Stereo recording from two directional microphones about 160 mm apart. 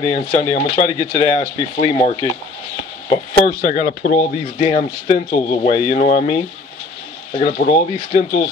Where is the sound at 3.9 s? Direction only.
90° left.